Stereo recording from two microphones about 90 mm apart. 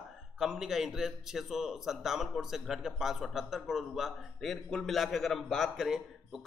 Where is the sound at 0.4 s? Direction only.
5° right (ahead or behind).